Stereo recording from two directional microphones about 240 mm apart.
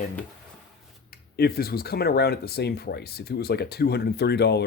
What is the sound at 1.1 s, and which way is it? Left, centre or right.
Speech, left.